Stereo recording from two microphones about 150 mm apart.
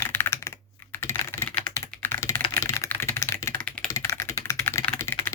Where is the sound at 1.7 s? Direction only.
15° left (ahead or behind).